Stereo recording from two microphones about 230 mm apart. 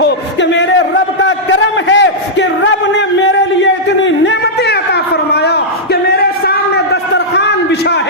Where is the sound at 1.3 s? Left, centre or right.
Left.